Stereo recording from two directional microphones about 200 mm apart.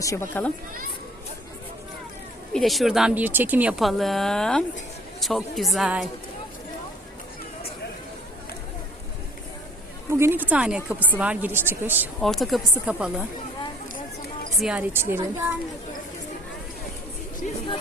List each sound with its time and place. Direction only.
0.0 s speech: 15° left (ahead or behind)
2.5 s speech: centre (ahead or behind)
10.1 s a woman's voice: 10° right (ahead or behind)
12.2 s speech: centre (ahead or behind)
14.6 s a woman's voice: 5° right (ahead or behind)
17.4 s music: 40° left (ahead or behind)